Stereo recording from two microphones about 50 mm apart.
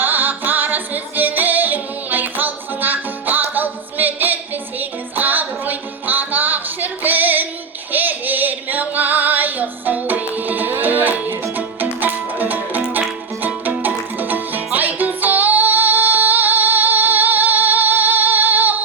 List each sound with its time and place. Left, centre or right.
0.0 s music: right
7.9 s singing: right
11.9 s music: right